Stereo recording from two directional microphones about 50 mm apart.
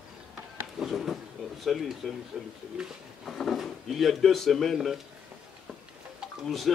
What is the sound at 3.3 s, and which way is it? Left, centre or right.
Speech, centre.